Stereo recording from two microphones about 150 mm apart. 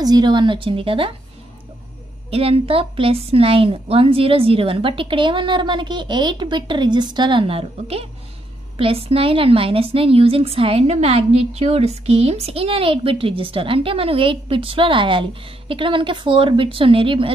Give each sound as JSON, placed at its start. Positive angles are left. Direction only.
{"t": 0.0, "sound": "a woman's voice", "side_deg": -30}
{"t": 2.3, "sound": "a woman's voice", "side_deg": -40}